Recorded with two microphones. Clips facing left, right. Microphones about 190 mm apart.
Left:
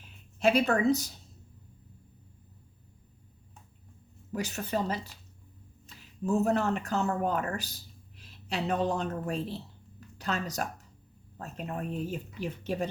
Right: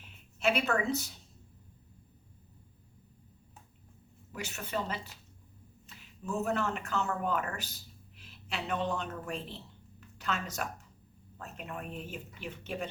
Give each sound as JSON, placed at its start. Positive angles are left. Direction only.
{"t": 0.3, "sound": "speech", "side_deg": 35}
{"t": 4.3, "sound": "speech", "side_deg": 35}
{"t": 6.0, "sound": "a woman's voice", "side_deg": 35}